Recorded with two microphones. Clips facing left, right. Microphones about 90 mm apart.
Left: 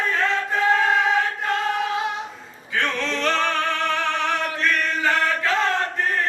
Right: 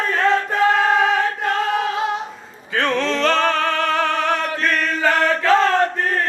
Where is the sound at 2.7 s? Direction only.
90° right.